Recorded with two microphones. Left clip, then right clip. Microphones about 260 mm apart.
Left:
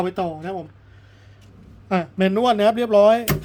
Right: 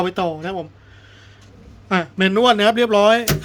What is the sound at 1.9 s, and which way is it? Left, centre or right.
A man's voice, centre.